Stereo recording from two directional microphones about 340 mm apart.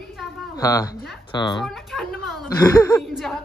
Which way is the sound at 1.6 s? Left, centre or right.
Centre.